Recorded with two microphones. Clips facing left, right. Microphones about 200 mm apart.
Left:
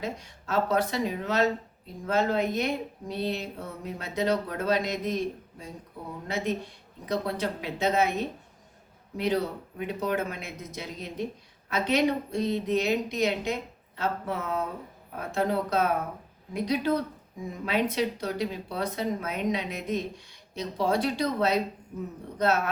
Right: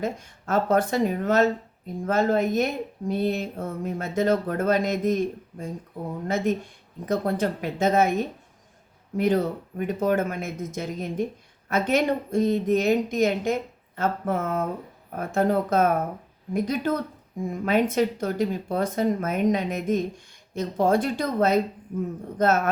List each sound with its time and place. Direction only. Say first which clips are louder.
0.0 s speech: right 5 dB; 50° right (ahead or behind)